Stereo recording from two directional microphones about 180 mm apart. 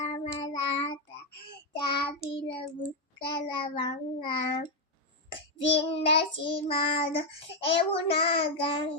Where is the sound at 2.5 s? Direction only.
30° left (ahead or behind).